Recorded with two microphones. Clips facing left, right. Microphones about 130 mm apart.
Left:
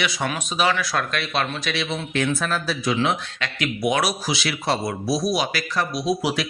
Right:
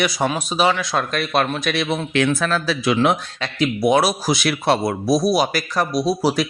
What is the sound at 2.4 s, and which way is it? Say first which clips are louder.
Speech: right 4 dB; 90° right.